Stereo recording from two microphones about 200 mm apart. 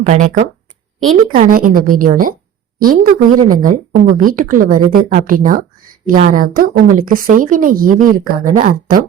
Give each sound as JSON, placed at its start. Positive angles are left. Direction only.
{"t": 0.0, "sound": "speech", "side_deg": -35}